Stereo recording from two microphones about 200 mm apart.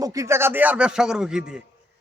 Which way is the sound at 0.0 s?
15° right (ahead or behind).